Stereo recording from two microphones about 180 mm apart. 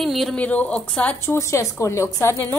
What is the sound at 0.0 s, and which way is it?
A woman's voice, centre (ahead or behind).